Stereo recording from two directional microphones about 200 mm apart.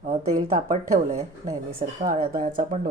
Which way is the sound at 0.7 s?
35° right (ahead or behind).